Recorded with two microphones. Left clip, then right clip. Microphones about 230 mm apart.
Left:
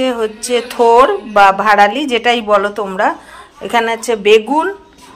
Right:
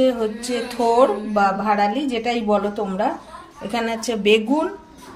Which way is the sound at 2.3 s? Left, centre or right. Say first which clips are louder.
Left 8 dB; left.